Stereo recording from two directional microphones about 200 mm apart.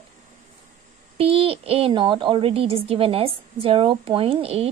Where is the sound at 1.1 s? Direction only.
30° right (ahead or behind).